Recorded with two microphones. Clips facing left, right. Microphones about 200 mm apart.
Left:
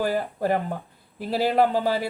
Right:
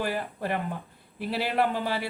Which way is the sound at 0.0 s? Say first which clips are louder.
Left 6 dB; 45° left (ahead or behind).